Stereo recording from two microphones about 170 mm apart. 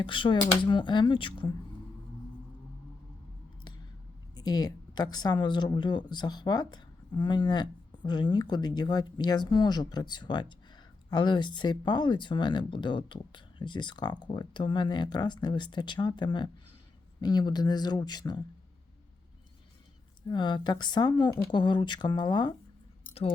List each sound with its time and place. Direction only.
0.0 s speech: 30° left (ahead or behind)
4.4 s speech: 25° left (ahead or behind)
20.2 s speech: 25° left (ahead or behind)